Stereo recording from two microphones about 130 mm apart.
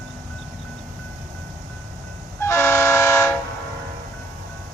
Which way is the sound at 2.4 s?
20° left (ahead or behind).